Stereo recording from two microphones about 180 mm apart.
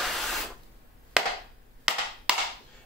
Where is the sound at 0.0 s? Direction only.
Centre (ahead or behind).